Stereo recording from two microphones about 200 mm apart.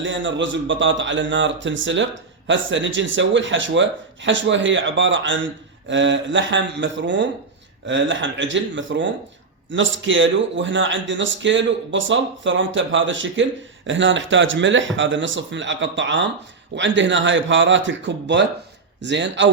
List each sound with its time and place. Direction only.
0.0 s a man's voice: 65° right (ahead or behind)